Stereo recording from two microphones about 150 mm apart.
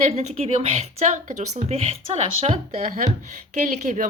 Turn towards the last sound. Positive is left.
turn(degrees=-55)  # may be behind; listen again after turning